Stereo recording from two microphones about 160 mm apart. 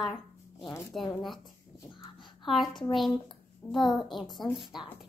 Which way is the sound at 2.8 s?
Centre (ahead or behind).